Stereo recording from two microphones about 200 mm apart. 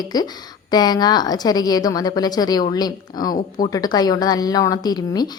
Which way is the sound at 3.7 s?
20° left (ahead or behind).